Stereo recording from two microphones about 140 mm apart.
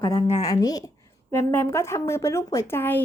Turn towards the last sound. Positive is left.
turn(degrees=15)  # may be behind; listen again after turning